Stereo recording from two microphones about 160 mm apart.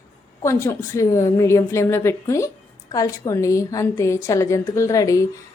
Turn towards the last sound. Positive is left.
turn(degrees=20)  # may be behind; listen again after turning